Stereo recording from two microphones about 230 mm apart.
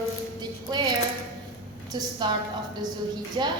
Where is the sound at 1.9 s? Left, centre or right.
Centre.